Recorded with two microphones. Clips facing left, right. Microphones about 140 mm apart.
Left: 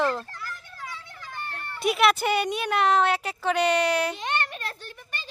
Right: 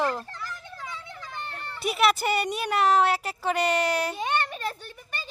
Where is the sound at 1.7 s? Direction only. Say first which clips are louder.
Left 2 dB; centre (ahead or behind).